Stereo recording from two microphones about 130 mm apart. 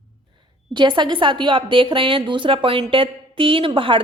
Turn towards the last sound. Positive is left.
turn(degrees=-40)  # may be behind; listen again after turning